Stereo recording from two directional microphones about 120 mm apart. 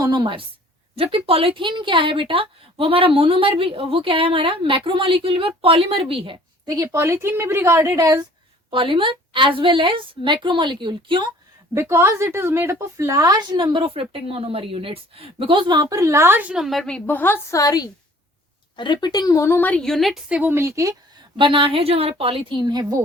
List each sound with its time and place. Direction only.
0.0 s a woman's voice: 35° right (ahead or behind)
0.9 s a woman's voice: 50° right (ahead or behind)
6.8 s a woman's voice: 20° right (ahead or behind)
8.7 s a woman's voice: 45° right (ahead or behind)
11.7 s a woman's voice: 20° right (ahead or behind)
16.6 s a woman's voice: 5° left (ahead or behind)
17.6 s a woman's voice: 30° left (ahead or behind); by 20.9 s 25° right (ahead or behind)
21.3 s a woman's voice: 45° right (ahead or behind)